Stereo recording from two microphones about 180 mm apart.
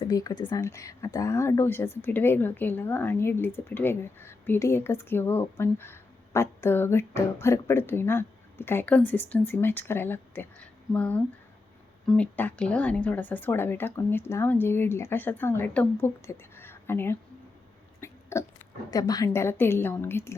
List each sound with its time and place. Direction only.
0.0 s speech: 20° left (ahead or behind)
18.0 s hiccup: 15° left (ahead or behind)
18.9 s speech: 20° left (ahead or behind)